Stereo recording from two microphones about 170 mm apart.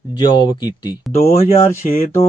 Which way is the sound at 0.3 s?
25° left (ahead or behind).